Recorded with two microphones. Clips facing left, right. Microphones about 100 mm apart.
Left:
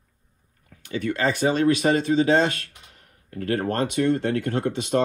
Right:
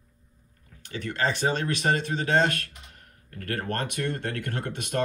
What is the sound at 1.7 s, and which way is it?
Speech, 50° right (ahead or behind).